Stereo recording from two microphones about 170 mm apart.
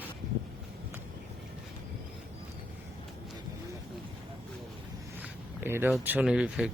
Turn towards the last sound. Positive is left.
turn(degrees=-5)  # may be behind; listen again after turning